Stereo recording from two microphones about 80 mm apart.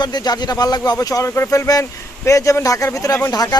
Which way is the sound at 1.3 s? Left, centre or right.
Left.